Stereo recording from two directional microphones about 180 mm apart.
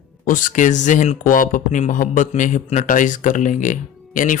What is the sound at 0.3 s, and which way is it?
Speech, 45° left (ahead or behind).